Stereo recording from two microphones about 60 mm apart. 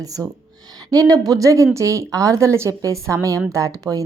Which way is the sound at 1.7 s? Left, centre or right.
Right.